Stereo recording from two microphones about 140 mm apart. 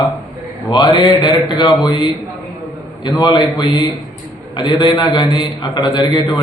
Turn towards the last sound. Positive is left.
turn(degrees=30)  # may be behind; listen again after turning